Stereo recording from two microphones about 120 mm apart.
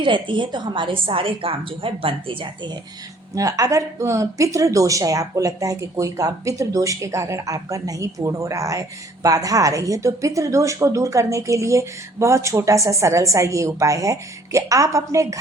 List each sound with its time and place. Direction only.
0.0 s a woman's voice: 45° right (ahead or behind)
3.3 s speech: 30° right (ahead or behind)